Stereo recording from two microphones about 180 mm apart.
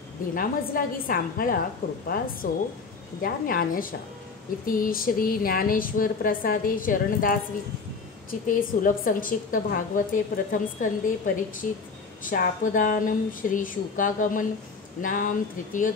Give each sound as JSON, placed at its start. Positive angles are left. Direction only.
{"t": 0.3, "sound": "a woman's voice", "side_deg": 50}